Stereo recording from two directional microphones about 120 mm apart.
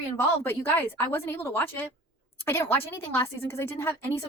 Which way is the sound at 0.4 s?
20° left (ahead or behind).